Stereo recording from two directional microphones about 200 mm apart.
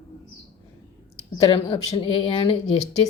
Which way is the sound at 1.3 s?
30° left (ahead or behind).